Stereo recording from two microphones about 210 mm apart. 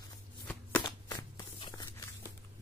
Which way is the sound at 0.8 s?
20° left (ahead or behind).